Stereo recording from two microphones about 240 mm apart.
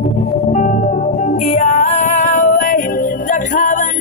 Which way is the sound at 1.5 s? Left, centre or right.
Left.